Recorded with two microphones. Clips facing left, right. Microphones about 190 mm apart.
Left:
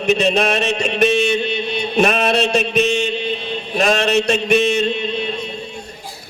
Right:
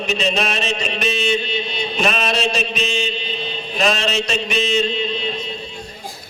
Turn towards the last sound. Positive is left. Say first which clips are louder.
# left 2 dB
turn(degrees=55)  # may be behind; listen again after turning